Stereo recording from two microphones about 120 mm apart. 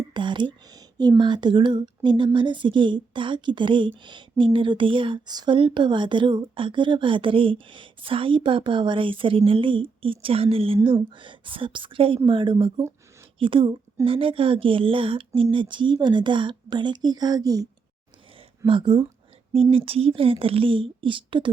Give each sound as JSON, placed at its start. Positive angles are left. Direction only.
{"t": 0.1, "sound": "speech", "side_deg": -40}
{"t": 18.6, "sound": "speech", "side_deg": -45}